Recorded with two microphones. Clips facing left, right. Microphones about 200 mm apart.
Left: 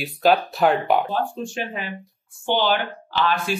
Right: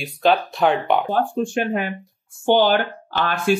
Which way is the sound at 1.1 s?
55° right (ahead or behind).